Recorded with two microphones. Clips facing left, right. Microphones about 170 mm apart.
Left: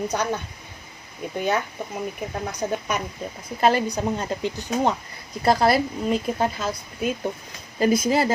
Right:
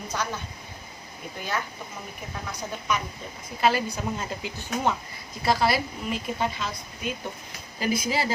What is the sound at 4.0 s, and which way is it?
Speech, 35° left (ahead or behind).